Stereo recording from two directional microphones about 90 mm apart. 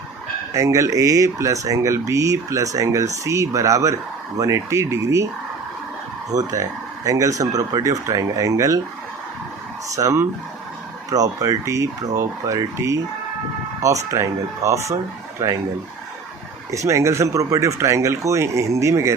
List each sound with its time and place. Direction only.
0.5 s speech: 35° right (ahead or behind)
6.3 s speech: 40° right (ahead or behind)
9.9 s speech: 35° right (ahead or behind)
16.7 s speech: 35° right (ahead or behind)